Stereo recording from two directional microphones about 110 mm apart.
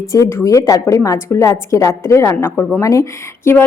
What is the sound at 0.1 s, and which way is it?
A woman's voice, 25° left (ahead or behind).